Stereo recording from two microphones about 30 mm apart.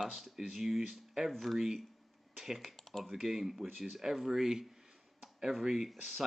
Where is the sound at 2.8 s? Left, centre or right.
Centre.